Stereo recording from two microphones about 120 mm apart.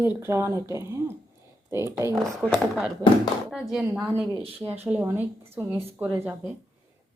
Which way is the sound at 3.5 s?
5° right (ahead or behind).